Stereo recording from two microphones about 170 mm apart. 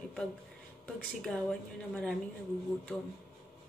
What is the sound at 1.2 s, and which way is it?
Speech, 5° left (ahead or behind).